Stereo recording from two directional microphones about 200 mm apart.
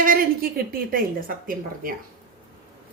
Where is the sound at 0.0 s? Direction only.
45° right (ahead or behind).